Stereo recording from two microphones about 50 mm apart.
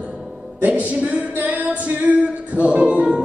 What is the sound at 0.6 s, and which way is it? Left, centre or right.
Speech, right.